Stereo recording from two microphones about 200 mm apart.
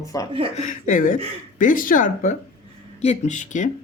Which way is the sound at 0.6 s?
40° left (ahead or behind).